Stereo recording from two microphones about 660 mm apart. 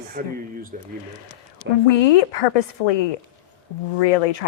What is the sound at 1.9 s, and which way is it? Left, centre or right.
Speech, left.